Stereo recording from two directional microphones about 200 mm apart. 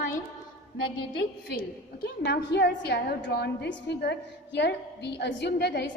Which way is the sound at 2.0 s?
55° left (ahead or behind).